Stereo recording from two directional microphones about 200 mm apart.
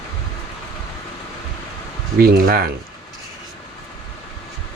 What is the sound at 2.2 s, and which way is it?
Speech, 45° right (ahead or behind).